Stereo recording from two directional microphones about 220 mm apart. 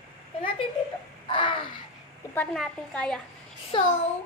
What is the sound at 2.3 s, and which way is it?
Child singing, 5° left (ahead or behind).